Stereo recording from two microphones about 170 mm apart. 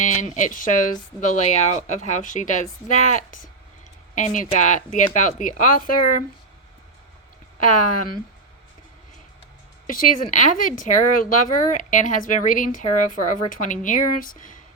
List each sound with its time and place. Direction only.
0.0 s speech: 45° left (ahead or behind)
7.6 s speech: 50° left (ahead or behind)
9.8 s speech: 55° left (ahead or behind)